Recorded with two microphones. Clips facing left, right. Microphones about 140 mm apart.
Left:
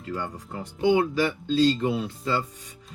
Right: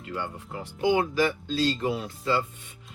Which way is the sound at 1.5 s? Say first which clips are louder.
Left 4 dB; 35° left (ahead or behind).